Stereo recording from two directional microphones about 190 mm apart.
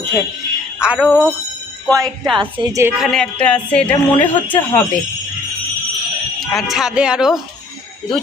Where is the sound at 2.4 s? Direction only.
20° right (ahead or behind).